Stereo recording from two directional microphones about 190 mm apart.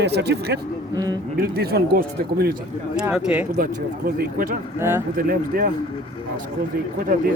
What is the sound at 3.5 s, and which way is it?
Speech, 50° right (ahead or behind).